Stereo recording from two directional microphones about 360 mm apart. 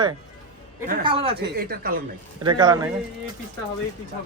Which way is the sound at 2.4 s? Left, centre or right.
Centre.